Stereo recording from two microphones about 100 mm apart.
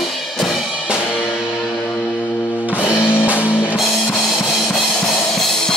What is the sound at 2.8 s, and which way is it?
Music, 20° left (ahead or behind).